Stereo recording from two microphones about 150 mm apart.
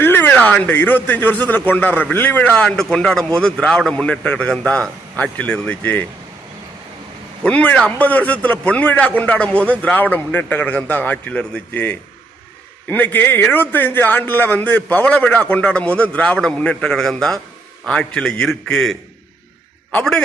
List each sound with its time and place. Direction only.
0.0 s speech: 15° left (ahead or behind)
7.4 s a man's voice: 10° left (ahead or behind)